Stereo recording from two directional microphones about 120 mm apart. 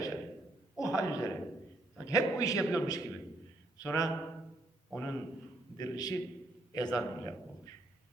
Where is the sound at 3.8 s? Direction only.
30° left (ahead or behind).